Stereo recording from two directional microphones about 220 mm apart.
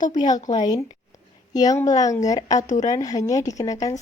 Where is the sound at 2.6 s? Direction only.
35° left (ahead or behind).